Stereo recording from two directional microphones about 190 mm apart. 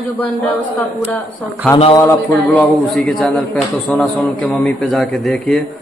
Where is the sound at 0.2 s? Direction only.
10° left (ahead or behind).